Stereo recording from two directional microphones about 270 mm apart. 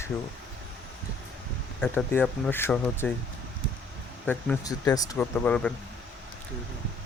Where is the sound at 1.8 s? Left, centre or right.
Centre.